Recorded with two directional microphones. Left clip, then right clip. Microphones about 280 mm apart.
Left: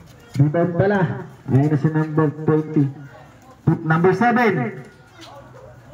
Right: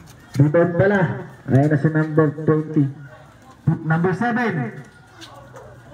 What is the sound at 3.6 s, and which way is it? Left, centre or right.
A man's voice, left.